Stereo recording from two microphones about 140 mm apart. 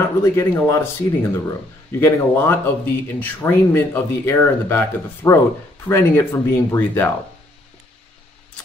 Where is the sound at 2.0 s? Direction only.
15° left (ahead or behind).